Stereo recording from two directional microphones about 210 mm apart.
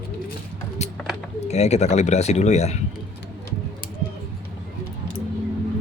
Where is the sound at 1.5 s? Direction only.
30° left (ahead or behind).